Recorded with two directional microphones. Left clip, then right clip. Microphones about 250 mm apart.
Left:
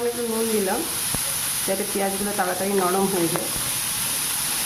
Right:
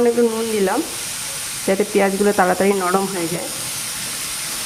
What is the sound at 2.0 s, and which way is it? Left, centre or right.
Speech, right.